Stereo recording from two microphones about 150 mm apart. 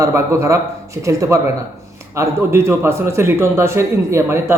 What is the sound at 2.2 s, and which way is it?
A man's voice, 15° right (ahead or behind).